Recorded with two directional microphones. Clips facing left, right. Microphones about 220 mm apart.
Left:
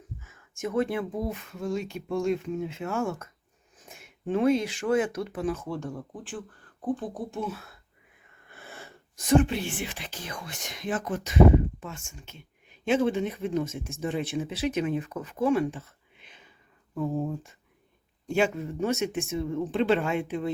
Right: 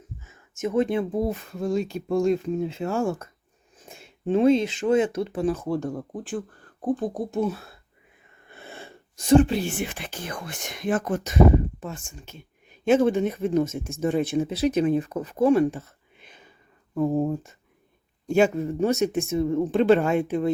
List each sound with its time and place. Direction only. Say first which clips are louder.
0.3 s speech: right 5 dB; 20° right (ahead or behind)
8.4 s speech: right 4 dB; 25° right (ahead or behind); by 11.3 s 45° right (ahead or behind)
11.8 s speech: right 5 dB; 35° right (ahead or behind)